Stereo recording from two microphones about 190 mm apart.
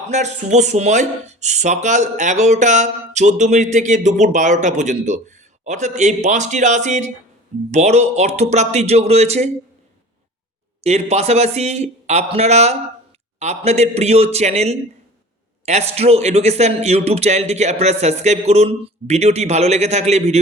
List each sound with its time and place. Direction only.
0.1 s speech: 35° right (ahead or behind)
10.8 s speech: 35° right (ahead or behind)